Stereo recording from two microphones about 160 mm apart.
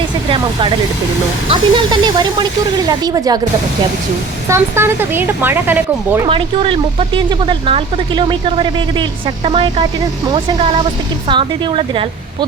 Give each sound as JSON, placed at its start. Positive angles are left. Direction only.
{"t": 1.5, "sound": "speech", "side_deg": -30}
{"t": 4.4, "sound": "speech", "side_deg": -15}
{"t": 6.2, "sound": "speech", "side_deg": -35}
{"t": 11.3, "sound": "speech", "side_deg": -30}